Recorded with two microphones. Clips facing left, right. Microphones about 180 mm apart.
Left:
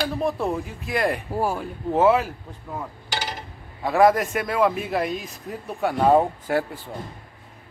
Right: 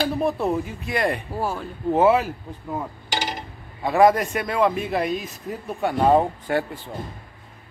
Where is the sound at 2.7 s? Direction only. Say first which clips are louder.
Right 3 dB; 15° right (ahead or behind).